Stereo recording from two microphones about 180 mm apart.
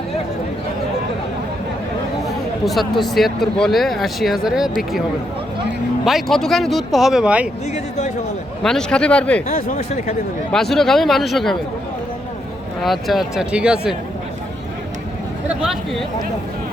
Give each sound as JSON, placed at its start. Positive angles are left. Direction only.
{"t": 2.2, "sound": "speech", "side_deg": 0}
{"t": 6.1, "sound": "speech", "side_deg": 0}
{"t": 7.7, "sound": "speech", "side_deg": 40}
{"t": 8.6, "sound": "speech", "side_deg": 5}
{"t": 9.5, "sound": "speech", "side_deg": 50}
{"t": 9.7, "sound": "speech", "side_deg": 40}
{"t": 10.5, "sound": "speech", "side_deg": 0}
{"t": 12.8, "sound": "speech", "side_deg": 0}
{"t": 15.4, "sound": "speech", "side_deg": -5}